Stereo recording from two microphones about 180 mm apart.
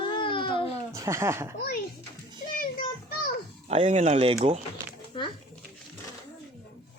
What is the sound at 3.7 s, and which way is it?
Speech, 40° right (ahead or behind).